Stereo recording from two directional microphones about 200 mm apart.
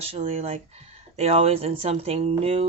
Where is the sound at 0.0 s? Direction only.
30° right (ahead or behind).